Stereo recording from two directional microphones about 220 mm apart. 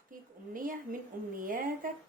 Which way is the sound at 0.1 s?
40° right (ahead or behind).